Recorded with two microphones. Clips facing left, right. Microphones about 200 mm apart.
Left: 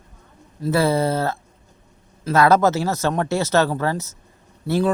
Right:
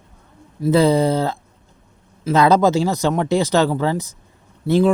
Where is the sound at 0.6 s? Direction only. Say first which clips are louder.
Right 4 dB; 15° right (ahead or behind).